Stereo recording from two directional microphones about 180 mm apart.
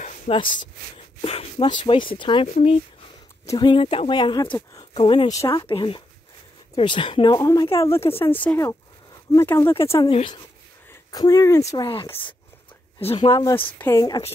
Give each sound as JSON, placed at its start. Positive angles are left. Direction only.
{"t": 0.3, "sound": "speech", "side_deg": 35}
{"t": 5.4, "sound": "speech", "side_deg": 20}
{"t": 8.0, "sound": "speech", "side_deg": 30}
{"t": 8.4, "sound": "speech", "side_deg": 10}
{"t": 10.0, "sound": "speech", "side_deg": 25}
{"t": 11.7, "sound": "speech", "side_deg": 30}
{"t": 13.3, "sound": "speech", "side_deg": 20}